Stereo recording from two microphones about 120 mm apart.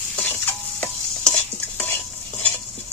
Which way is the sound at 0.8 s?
20° left (ahead or behind).